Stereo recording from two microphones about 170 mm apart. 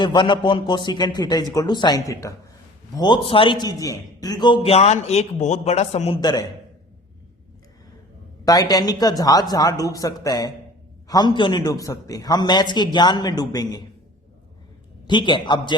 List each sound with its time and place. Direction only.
0.0 s a man's voice: 25° left (ahead or behind)
6.1 s a man's voice: 25° left (ahead or behind)
8.4 s a man's voice: 20° left (ahead or behind)
15.0 s a man's voice: 25° left (ahead or behind)